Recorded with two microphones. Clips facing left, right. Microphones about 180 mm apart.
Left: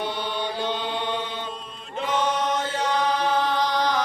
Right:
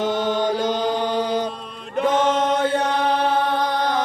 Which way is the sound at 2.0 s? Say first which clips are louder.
Right 6 dB; 50° right (ahead or behind).